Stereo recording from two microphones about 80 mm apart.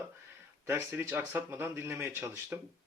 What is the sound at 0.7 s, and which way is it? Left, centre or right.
Speech, right.